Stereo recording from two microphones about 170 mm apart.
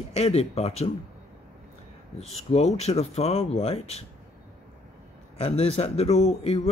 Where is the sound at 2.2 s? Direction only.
40° left (ahead or behind).